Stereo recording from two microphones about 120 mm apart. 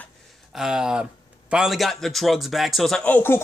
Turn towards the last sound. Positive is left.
turn(degrees=15)  # may be behind; listen again after turning